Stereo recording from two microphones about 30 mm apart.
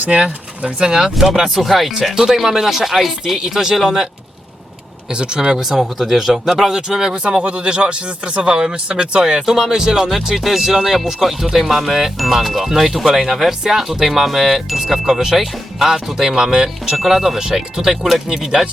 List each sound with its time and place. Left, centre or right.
0.8 s speech: right
1.5 s speech: centre
3.3 s speech: centre
5.1 s speech: right
5.4 s speech: centre
6.4 s speech: centre
7.4 s speech: right
8.5 s speech: right
8.9 s speech: right
9.2 s speech: right
9.6 s speech: centre
9.8 s speech: right
10.2 s speech: centre; by 17.0 s right
17.1 s speech: centre